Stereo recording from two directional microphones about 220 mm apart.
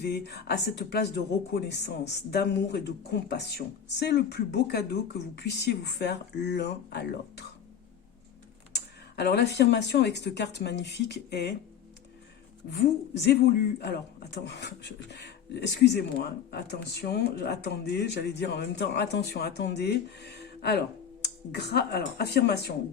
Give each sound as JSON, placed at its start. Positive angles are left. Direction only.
{"t": 0.1, "sound": "speech", "side_deg": 50}
{"t": 8.7, "sound": "speech", "side_deg": 50}
{"t": 12.7, "sound": "speech", "side_deg": 50}